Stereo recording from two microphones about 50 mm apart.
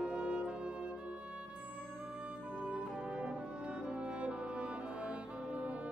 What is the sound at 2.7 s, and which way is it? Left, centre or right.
Brass instrument, right.